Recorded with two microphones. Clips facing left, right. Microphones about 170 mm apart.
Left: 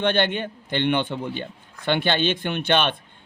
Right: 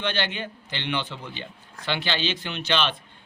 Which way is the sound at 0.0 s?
55° left (ahead or behind).